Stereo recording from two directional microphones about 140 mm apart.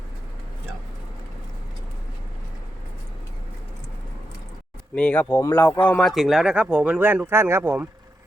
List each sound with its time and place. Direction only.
4.9 s speech: 10° left (ahead or behind); by 7.9 s 15° right (ahead or behind)